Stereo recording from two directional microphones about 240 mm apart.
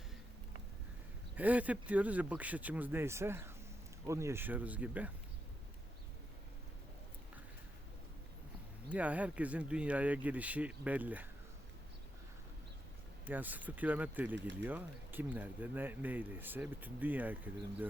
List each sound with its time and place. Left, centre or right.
1.4 s speech: centre
8.9 s speech: centre
13.2 s speech: centre